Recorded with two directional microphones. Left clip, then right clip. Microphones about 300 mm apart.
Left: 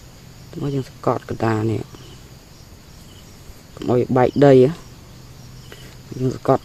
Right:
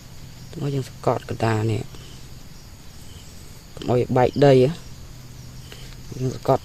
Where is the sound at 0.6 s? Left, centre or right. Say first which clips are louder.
Left 2 dB; centre.